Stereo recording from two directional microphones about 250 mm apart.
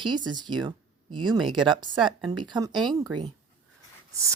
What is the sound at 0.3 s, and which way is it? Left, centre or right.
A woman's voice, centre.